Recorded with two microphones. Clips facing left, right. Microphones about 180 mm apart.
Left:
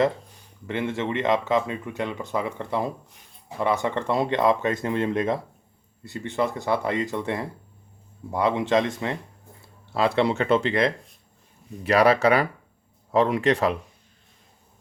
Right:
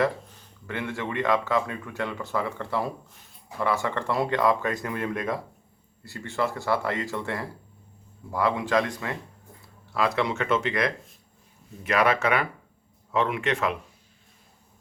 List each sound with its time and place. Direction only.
0.7 s speech: 20° left (ahead or behind)
9.6 s a sound: 30° left (ahead or behind)
10.2 s speech: 30° left (ahead or behind)